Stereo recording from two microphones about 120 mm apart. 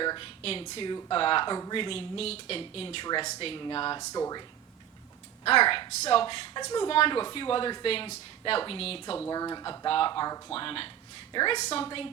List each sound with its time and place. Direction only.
0.0 s a sound: 40° left (ahead or behind)
0.4 s speech: 55° left (ahead or behind); by 1.7 s 35° left (ahead or behind)
1.7 s speech: 50° left (ahead or behind)
3.6 s speech: 40° left (ahead or behind)
4.0 s speech: 30° left (ahead or behind)
5.5 s speech: 50° left (ahead or behind)
9.3 s speech: 30° left (ahead or behind)
9.8 s speech: 50° left (ahead or behind)
10.1 s speech: 30° left (ahead or behind)
10.5 s speech: 50° left (ahead or behind)
11.5 s a woman's voice: 55° left (ahead or behind)